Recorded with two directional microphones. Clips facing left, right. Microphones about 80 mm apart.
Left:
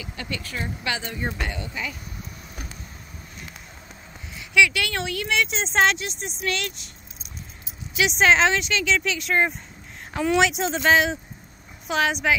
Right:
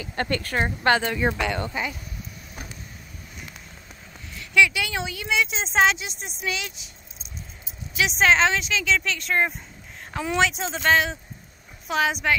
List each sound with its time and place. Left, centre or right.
0.0 s speech: right
1.0 s speech: right
4.6 s speech: centre
7.9 s speech: centre